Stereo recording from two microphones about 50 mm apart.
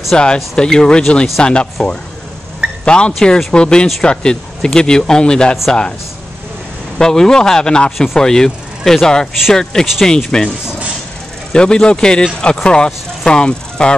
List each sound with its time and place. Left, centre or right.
0.1 s speech: centre
3.2 s speech: centre
3.5 s speech: centre
7.0 s speech: centre
11.5 s speech: centre